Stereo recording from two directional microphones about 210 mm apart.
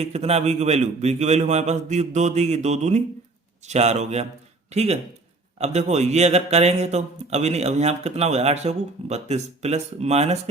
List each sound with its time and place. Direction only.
0.0 s speech: 30° right (ahead or behind)